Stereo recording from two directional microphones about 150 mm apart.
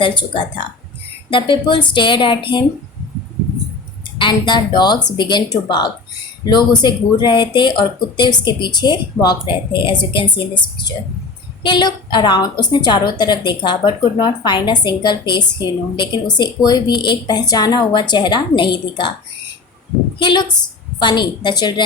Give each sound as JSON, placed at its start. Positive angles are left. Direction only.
{"t": 0.0, "sound": "speech", "side_deg": 35}
{"t": 4.2, "sound": "speech", "side_deg": 30}
{"t": 11.6, "sound": "a woman's voice", "side_deg": 30}
{"t": 20.1, "sound": "a woman's voice", "side_deg": 30}